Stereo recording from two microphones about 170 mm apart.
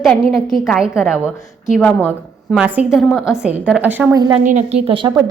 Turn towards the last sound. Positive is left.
turn(degrees=-30)  # may be behind; listen again after turning